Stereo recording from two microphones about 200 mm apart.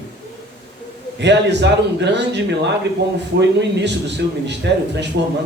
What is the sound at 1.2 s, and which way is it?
A man's voice, 60° right (ahead or behind).